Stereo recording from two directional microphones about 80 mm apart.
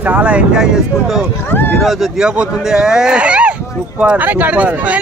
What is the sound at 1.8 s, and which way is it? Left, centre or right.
Speech, centre.